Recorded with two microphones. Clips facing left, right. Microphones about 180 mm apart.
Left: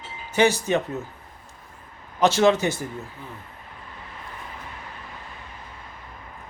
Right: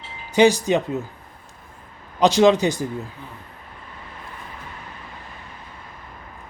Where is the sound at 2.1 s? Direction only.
15° right (ahead or behind).